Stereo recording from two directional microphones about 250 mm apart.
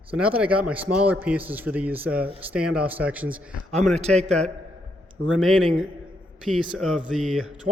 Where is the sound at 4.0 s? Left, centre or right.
Right.